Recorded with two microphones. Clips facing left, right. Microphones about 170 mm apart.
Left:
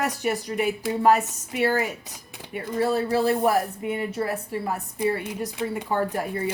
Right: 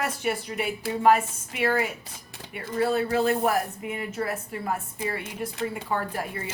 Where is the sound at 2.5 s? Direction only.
35° left (ahead or behind).